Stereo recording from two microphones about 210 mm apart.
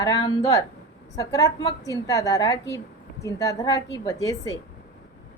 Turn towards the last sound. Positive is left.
turn(degrees=15)  # may be behind; listen again after turning